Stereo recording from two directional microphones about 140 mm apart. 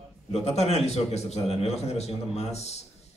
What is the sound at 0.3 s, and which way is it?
A man's voice, 50° left (ahead or behind).